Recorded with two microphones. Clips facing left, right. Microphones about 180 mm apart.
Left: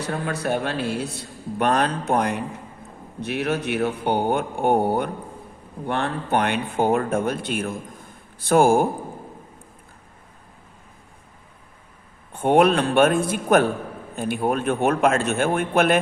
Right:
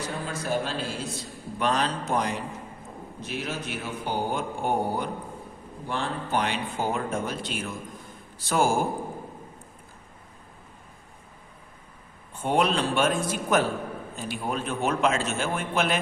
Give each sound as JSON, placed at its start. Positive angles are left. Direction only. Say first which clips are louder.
{"t": 0.0, "sound": "speech", "louder": "left 6 dB", "side_deg": 65}
{"t": 12.3, "sound": "speech", "louder": "left 7 dB", "side_deg": 60}